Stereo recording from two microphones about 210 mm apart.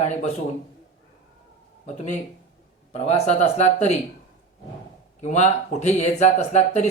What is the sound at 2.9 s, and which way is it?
Speech, 30° left (ahead or behind).